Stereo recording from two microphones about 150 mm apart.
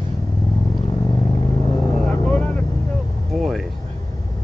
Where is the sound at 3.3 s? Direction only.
Centre (ahead or behind).